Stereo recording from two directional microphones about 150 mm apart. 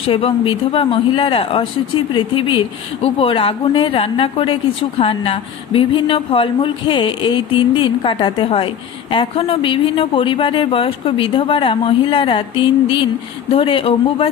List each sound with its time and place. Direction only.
0.0 s speech: 35° left (ahead or behind)